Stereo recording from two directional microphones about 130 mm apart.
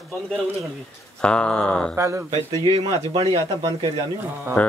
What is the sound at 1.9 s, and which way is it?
Speech, 20° right (ahead or behind).